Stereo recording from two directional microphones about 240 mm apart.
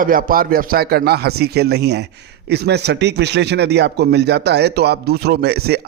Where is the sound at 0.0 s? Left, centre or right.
Right.